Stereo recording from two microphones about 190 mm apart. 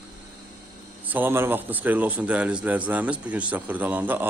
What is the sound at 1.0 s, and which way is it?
A man's voice, 10° right (ahead or behind).